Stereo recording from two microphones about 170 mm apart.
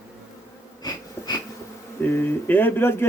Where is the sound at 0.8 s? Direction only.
25° left (ahead or behind).